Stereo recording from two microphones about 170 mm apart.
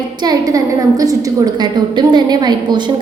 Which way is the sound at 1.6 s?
25° right (ahead or behind).